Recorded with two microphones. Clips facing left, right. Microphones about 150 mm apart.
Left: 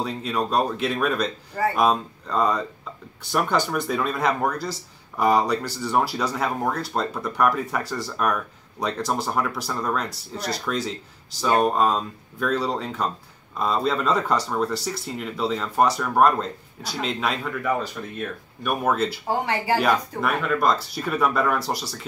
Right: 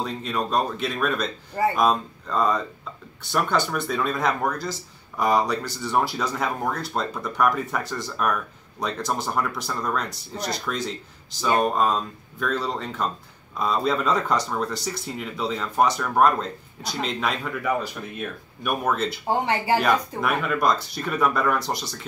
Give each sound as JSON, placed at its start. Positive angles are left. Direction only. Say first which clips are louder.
{"t": 0.0, "sound": "speech", "louder": "left 1 dB", "side_deg": 5}
{"t": 18.9, "sound": "speech", "louder": "left 3 dB", "side_deg": 5}
{"t": 19.2, "sound": "speech", "louder": "right 5 dB", "side_deg": -25}
{"t": 19.8, "sound": "speech", "louder": "even", "side_deg": 0}